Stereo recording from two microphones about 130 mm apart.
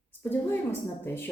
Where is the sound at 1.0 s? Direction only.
15° left (ahead or behind).